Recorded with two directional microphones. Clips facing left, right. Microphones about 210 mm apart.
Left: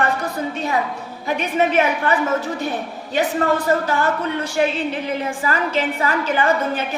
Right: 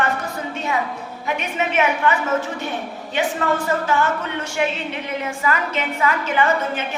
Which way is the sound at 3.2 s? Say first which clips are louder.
Left 2 dB; 35° left (ahead or behind).